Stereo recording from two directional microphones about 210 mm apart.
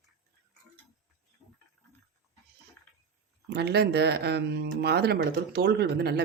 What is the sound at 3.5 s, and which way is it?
Speech, 50° right (ahead or behind).